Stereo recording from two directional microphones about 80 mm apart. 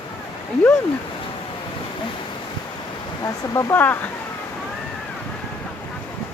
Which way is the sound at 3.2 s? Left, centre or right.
Left.